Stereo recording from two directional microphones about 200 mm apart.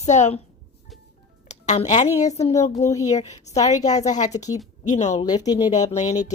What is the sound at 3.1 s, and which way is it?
A woman's voice, 35° left (ahead or behind).